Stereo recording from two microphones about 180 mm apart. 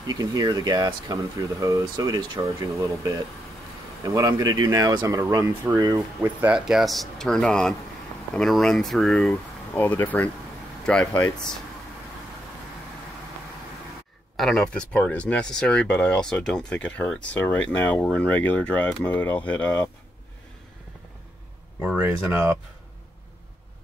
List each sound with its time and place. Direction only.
0.0 s speech: 20° right (ahead or behind); by 11.5 s 5° left (ahead or behind)
14.3 s speech: centre (ahead or behind)
21.8 s speech: 10° right (ahead or behind)